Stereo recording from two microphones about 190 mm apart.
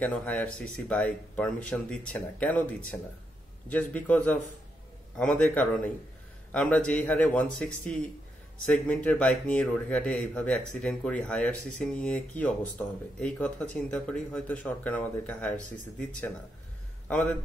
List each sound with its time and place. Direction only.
0.0 s speech: 5° left (ahead or behind)
17.1 s speech: 5° left (ahead or behind)